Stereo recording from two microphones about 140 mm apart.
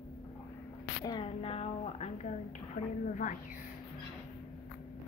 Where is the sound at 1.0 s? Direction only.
40° left (ahead or behind); by 3.4 s 65° left (ahead or behind).